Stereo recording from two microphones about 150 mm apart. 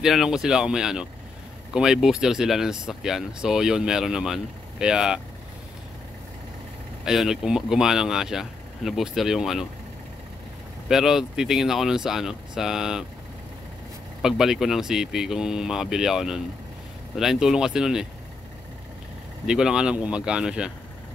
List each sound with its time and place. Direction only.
0.0 s speech: 5° right (ahead or behind)
7.1 s speech: 5° right (ahead or behind)
10.9 s speech: 5° right (ahead or behind)
14.2 s speech: 5° right (ahead or behind)
19.4 s speech: 5° right (ahead or behind)